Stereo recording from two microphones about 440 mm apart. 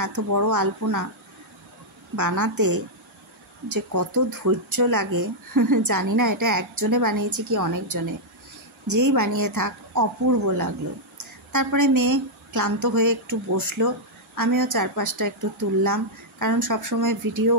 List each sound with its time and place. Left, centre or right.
0.0 s a woman's voice: right
2.1 s a woman's voice: right